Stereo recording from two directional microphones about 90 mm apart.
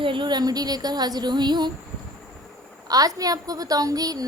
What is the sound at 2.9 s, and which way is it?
A woman's voice, 40° right (ahead or behind).